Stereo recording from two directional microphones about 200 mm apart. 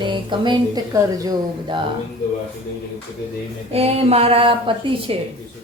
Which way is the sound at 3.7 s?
30° right (ahead or behind).